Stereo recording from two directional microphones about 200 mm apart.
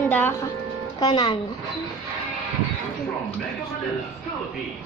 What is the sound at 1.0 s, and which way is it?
Speech, 20° left (ahead or behind).